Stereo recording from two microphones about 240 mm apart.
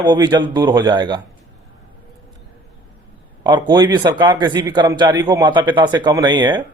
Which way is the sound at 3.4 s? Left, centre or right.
Centre.